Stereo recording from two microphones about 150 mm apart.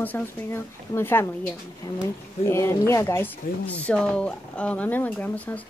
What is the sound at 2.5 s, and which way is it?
Speech, 20° left (ahead or behind).